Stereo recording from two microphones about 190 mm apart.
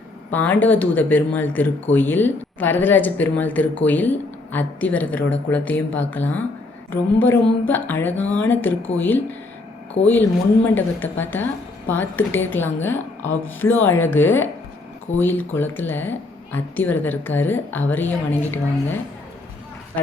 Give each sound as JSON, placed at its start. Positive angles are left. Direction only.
{"t": 0.3, "sound": "speech", "side_deg": 10}
{"t": 10.0, "sound": "speech", "side_deg": 30}
{"t": 10.8, "sound": "speech", "side_deg": 10}